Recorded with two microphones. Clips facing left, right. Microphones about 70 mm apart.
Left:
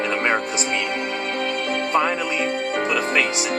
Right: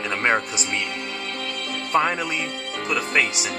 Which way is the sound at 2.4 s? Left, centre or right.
Left.